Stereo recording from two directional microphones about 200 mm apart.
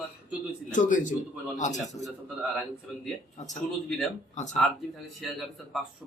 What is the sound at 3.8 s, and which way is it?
Speech, centre (ahead or behind).